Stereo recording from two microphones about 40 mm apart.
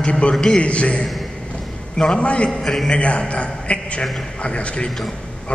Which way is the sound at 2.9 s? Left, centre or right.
Left.